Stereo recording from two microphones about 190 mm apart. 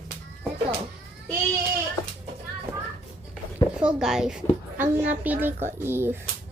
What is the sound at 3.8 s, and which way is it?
Speech, 5° right (ahead or behind).